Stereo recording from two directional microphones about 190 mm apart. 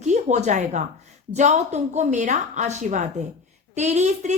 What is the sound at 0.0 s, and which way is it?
A woman's voice, 40° right (ahead or behind).